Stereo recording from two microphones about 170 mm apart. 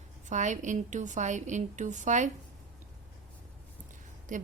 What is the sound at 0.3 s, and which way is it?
A woman's voice, 45° right (ahead or behind).